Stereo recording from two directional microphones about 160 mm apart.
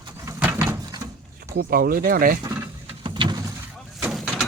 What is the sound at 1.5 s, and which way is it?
Speech, 65° right (ahead or behind).